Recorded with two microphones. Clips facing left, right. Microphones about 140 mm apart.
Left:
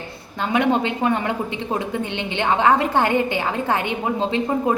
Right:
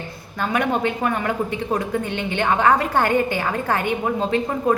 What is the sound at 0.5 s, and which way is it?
Speech, 20° left (ahead or behind).